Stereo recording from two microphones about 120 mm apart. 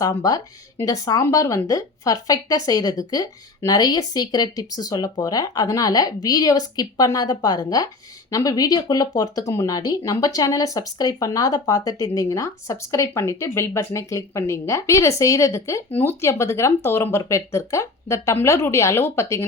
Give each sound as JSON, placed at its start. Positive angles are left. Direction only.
{"t": 0.0, "sound": "speech", "side_deg": 30}